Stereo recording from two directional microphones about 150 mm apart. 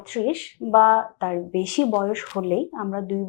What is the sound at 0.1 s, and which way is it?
Speech, 20° left (ahead or behind).